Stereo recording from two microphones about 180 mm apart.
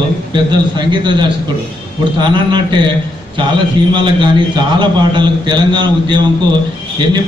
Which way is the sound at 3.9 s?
25° right (ahead or behind).